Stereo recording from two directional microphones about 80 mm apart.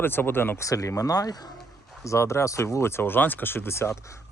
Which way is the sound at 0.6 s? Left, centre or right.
Left.